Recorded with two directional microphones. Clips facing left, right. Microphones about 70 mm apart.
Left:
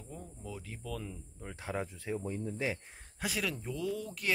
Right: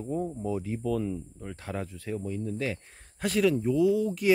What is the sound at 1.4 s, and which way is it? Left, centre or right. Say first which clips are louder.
Speech: left 3 dB; centre.